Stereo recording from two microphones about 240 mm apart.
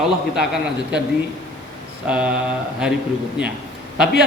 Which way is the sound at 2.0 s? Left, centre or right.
Centre.